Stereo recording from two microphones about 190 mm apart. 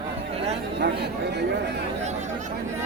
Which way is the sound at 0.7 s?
60° right (ahead or behind).